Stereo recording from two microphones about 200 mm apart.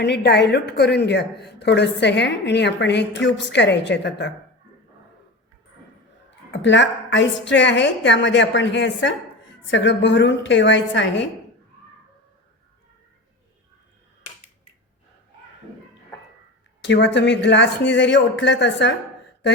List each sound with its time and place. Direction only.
0.0 s a woman's voice: 55° left (ahead or behind)
6.5 s a woman's voice: 65° left (ahead or behind)
16.8 s a woman's voice: 60° left (ahead or behind)